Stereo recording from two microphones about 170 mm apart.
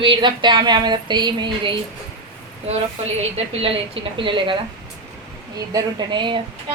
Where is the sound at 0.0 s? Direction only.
30° right (ahead or behind).